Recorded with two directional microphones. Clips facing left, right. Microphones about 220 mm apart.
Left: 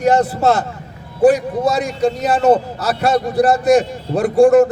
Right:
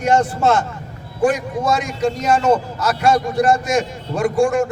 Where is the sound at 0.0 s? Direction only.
35° left (ahead or behind).